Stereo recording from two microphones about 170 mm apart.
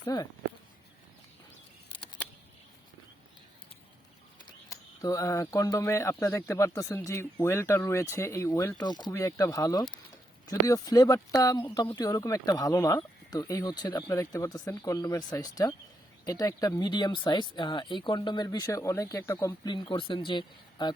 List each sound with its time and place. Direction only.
0.1 s speech: 25° left (ahead or behind)
4.4 s speech: 20° left (ahead or behind)
19.7 s speech: 30° left (ahead or behind)